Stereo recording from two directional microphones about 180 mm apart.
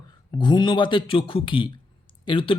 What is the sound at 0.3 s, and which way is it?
Speech, 25° left (ahead or behind).